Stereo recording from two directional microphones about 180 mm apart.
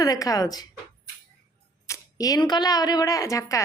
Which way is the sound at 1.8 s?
20° left (ahead or behind).